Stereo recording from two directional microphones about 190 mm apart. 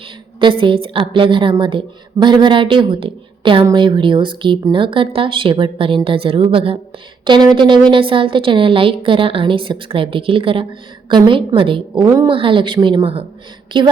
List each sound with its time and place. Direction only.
0.3 s a woman's voice: 25° right (ahead or behind)
12.0 s a woman's voice: 15° right (ahead or behind)
12.3 s a woman's voice: 25° right (ahead or behind)